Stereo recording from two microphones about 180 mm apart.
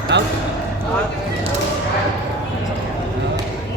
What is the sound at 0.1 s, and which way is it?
Basketball bounce, 75° right (ahead or behind).